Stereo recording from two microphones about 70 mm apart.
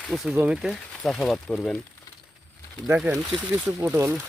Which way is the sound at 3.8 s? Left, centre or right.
Right.